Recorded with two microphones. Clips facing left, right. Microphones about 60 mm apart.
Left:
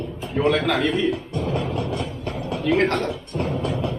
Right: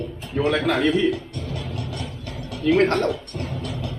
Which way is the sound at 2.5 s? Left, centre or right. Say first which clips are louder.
Right 2 dB; left.